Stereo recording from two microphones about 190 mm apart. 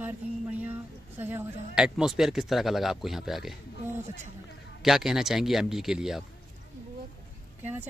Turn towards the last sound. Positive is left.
turn(degrees=-10)  # may be behind; listen again after turning